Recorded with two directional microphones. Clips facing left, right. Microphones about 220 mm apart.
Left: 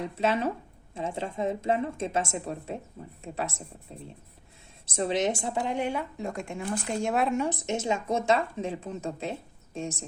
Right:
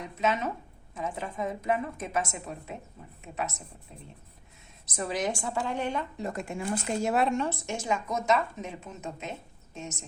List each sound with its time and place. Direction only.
0.0 s speech: 30° left (ahead or behind)
4.9 s speech: 25° left (ahead or behind); by 7.3 s centre (ahead or behind)
7.3 s speech: 15° left (ahead or behind); by 10.1 s 30° left (ahead or behind)